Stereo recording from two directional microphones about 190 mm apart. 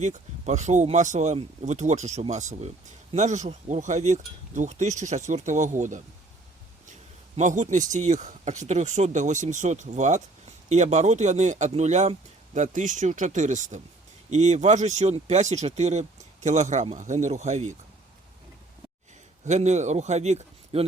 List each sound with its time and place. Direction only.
0.0 s speech: 40° right (ahead or behind)
7.3 s speech: 40° right (ahead or behind)
19.5 s speech: 35° right (ahead or behind)